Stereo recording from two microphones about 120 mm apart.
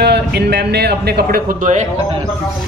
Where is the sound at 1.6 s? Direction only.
90° right.